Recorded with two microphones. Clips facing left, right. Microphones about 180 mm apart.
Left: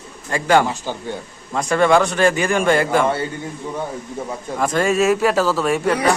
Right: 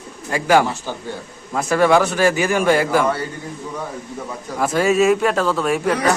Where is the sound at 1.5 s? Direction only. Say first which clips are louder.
Even; 5° right (ahead or behind).